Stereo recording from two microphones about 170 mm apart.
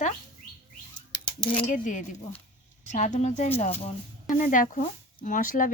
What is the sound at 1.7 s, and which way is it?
Speech, 50° left (ahead or behind).